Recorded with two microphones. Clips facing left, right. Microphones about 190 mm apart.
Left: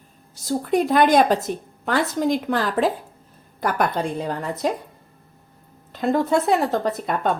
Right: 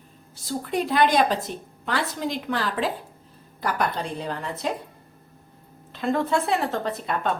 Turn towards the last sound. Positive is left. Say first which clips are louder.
# left 4 dB
turn(degrees=40)  # may be behind; listen again after turning